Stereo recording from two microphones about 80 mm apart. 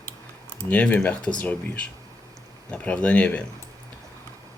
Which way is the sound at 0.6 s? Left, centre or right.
Centre.